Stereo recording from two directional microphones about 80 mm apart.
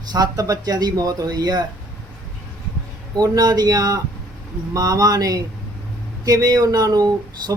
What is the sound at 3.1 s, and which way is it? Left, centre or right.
Speech, right.